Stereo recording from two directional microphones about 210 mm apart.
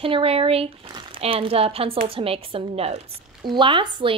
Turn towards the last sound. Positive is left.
turn(degrees=-25)  # may be behind; listen again after turning